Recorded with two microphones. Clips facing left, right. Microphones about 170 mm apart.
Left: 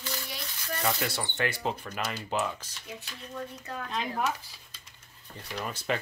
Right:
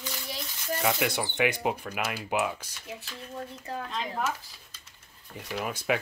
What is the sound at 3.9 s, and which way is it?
Speech, 5° right (ahead or behind).